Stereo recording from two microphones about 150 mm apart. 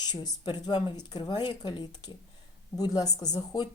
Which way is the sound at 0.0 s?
25° left (ahead or behind).